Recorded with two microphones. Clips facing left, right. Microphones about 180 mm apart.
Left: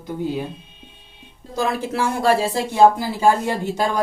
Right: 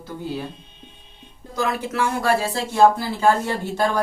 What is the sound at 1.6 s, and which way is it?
Speech, 30° left (ahead or behind).